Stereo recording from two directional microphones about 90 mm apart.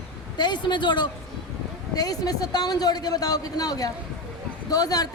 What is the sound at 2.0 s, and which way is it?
A man's voice, 45° left (ahead or behind).